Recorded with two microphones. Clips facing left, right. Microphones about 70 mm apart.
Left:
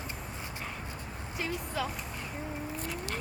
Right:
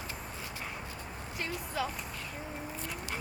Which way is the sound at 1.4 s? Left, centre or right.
Centre.